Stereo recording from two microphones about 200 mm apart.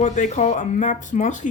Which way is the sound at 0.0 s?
35° left (ahead or behind).